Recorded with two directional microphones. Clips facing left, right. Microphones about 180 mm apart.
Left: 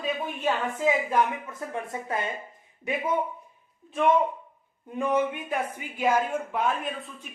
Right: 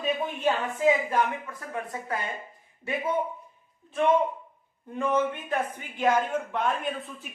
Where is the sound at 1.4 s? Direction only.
25° left (ahead or behind).